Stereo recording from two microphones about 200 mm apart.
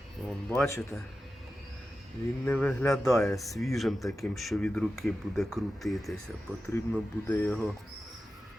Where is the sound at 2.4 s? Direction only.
5° left (ahead or behind).